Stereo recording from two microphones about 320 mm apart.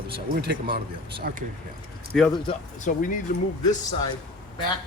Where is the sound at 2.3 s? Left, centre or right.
Centre.